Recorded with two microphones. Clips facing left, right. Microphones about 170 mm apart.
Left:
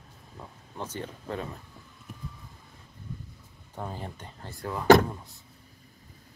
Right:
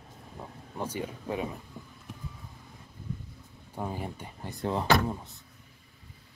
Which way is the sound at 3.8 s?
10° right (ahead or behind).